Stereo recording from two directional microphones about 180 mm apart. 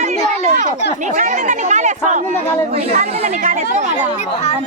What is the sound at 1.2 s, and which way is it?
Speech, 45° right (ahead or behind).